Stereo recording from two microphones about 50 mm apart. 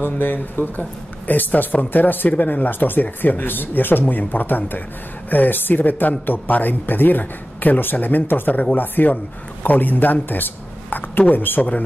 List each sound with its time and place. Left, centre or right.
0.0 s speech: left